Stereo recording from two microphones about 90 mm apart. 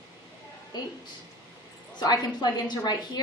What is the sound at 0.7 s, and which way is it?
Speech, 55° left (ahead or behind).